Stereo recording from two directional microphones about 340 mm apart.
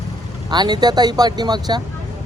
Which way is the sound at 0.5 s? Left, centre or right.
Centre.